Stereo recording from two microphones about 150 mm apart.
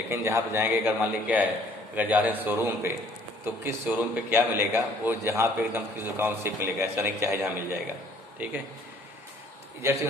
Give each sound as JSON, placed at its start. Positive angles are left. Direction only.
{"t": 0.1, "sound": "a man's voice", "side_deg": -15}